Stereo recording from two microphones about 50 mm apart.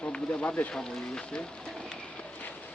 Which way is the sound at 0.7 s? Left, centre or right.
Centre.